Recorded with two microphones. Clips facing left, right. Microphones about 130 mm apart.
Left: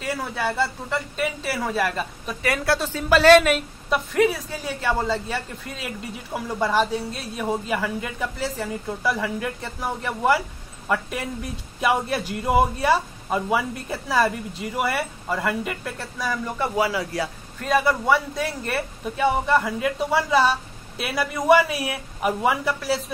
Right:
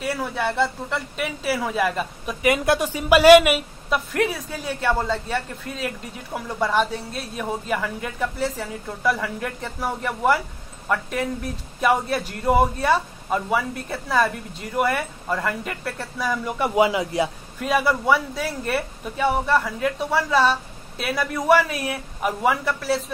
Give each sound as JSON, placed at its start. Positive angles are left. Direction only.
{"t": 0.1, "sound": "speech", "side_deg": 5}
{"t": 1.2, "sound": "a woman's voice", "side_deg": -10}
{"t": 2.4, "sound": "a woman's voice", "side_deg": -20}
{"t": 3.9, "sound": "speech", "side_deg": 0}
{"t": 16.5, "sound": "speech", "side_deg": -15}
{"t": 17.6, "sound": "speech", "side_deg": -5}